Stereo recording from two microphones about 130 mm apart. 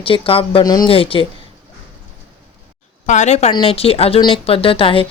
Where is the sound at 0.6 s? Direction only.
30° left (ahead or behind).